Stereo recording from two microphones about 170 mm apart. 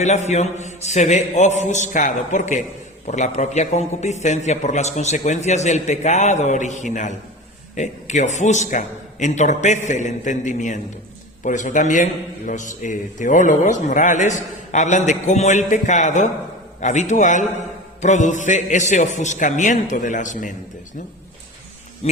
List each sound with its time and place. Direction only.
0.0 s a man's voice: 45° left (ahead or behind)
22.0 s speech: 40° left (ahead or behind)